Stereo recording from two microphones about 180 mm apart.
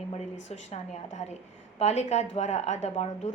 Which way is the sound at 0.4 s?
40° left (ahead or behind).